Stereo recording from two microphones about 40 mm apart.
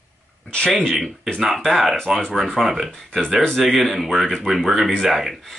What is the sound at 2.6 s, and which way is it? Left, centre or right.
Speech, centre.